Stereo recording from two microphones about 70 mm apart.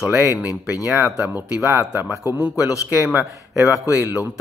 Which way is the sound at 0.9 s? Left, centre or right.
Right.